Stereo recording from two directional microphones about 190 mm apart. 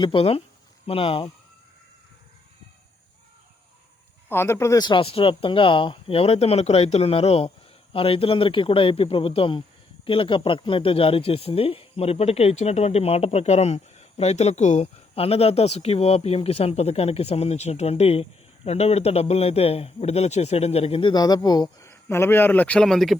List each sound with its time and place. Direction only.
0.0 s speech: 30° left (ahead or behind)
4.3 s speech: 15° left (ahead or behind)